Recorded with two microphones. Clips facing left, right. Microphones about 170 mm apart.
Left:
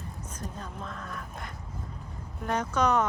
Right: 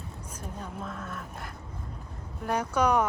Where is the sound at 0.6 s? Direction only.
5° right (ahead or behind).